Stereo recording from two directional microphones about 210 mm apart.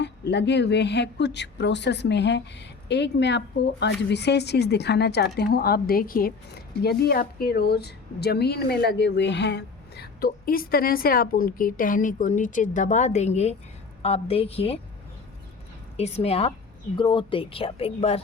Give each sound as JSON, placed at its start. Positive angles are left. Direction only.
{"t": 0.0, "sound": "a woman's voice", "side_deg": 55}
{"t": 16.0, "sound": "speech", "side_deg": 30}